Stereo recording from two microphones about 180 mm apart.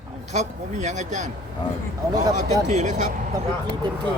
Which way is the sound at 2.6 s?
40° right (ahead or behind).